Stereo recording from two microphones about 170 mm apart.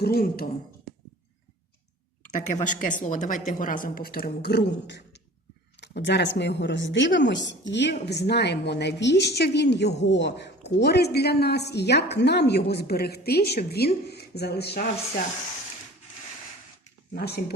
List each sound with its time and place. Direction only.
0.0 s speech: 65° left (ahead or behind)
2.3 s a woman's voice: 45° left (ahead or behind); by 10.5 s 90° left
10.8 s a woman's voice: 75° left (ahead or behind)
17.2 s a woman's voice: 70° left (ahead or behind)